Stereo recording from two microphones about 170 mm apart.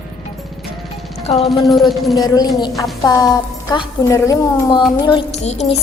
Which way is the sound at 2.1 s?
20° left (ahead or behind).